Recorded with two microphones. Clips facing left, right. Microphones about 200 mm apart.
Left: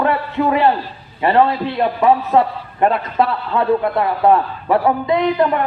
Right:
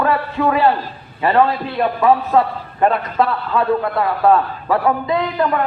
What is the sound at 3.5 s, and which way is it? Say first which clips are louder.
A man's voice: left 1 dB; 20° left (ahead or behind).